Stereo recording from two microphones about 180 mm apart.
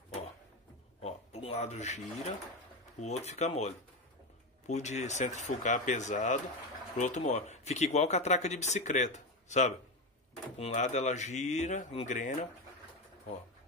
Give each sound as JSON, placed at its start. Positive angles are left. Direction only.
{"t": 1.0, "sound": "speech", "side_deg": 35}